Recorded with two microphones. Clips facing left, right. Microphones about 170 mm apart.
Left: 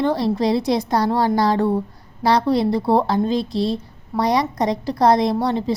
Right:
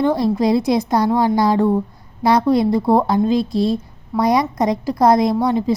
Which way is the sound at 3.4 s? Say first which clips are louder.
Right 3 dB; 45° right (ahead or behind).